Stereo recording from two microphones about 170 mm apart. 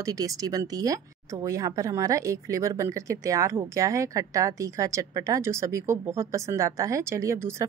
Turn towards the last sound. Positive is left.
turn(degrees=-15)  # may be behind; listen again after turning